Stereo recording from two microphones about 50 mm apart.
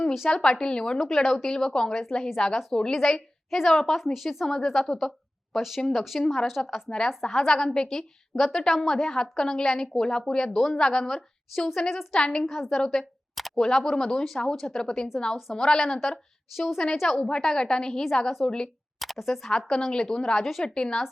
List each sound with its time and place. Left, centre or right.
0.3 s a woman's voice: centre
0.9 s a woman's voice: centre
13.3 s a sound: centre
13.7 s a woman's voice: centre
18.9 s speech: centre
19.5 s a woman's voice: centre
20.4 s a woman's voice: centre
20.7 s a woman's voice: centre